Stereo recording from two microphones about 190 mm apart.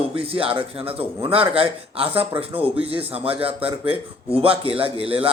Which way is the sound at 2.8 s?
30° right (ahead or behind).